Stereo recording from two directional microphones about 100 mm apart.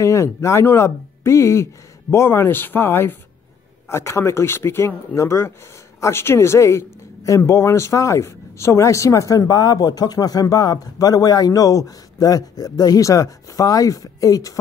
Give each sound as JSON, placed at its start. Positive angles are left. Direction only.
{"t": 0.0, "sound": "speech", "side_deg": 30}